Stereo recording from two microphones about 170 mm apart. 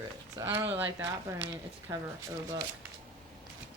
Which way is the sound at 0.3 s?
10° right (ahead or behind).